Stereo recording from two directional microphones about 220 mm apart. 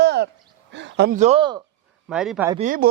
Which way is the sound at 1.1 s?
30° right (ahead or behind).